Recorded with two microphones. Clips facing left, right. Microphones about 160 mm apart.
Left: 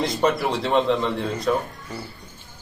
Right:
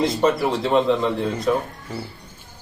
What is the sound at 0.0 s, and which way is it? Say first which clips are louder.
A man's voice: right 2 dB; centre (ahead or behind).